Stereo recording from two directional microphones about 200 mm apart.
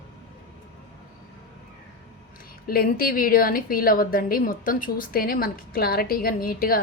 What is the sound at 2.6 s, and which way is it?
A woman's voice, 50° left (ahead or behind).